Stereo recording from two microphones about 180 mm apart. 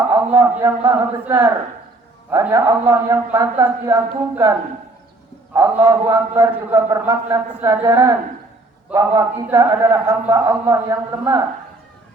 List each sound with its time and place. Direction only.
0.1 s a man's voice: 15° right (ahead or behind)
5.5 s a man's voice: 15° right (ahead or behind)